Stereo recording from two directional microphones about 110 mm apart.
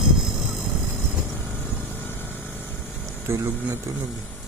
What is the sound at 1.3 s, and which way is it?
Vehicle, 20° left (ahead or behind).